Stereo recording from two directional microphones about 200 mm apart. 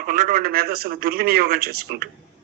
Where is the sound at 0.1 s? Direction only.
45° right (ahead or behind).